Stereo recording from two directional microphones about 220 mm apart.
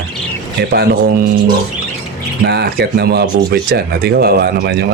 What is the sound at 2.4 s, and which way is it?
Speech, 45° right (ahead or behind).